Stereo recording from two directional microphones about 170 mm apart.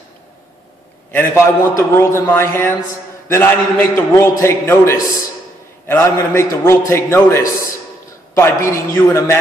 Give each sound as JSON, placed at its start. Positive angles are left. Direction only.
{"t": 1.1, "sound": "a man's voice", "side_deg": 15}